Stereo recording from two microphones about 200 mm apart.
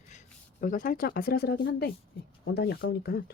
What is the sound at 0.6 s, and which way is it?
Speech, 40° left (ahead or behind).